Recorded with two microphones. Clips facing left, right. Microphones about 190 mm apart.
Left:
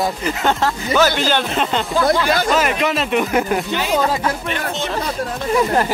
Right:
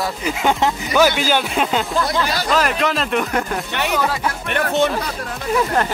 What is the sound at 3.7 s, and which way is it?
Speech, 65° right (ahead or behind).